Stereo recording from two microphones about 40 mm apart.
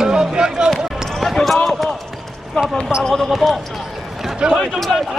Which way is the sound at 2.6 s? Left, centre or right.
Centre.